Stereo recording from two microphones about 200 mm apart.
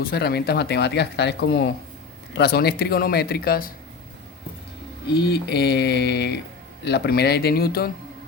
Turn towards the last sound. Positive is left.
turn(degrees=50)  # may be behind; listen again after turning